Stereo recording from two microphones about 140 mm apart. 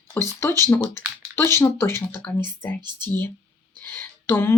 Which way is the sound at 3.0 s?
15° left (ahead or behind).